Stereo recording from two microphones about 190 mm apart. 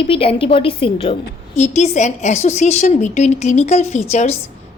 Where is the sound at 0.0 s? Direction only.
30° left (ahead or behind).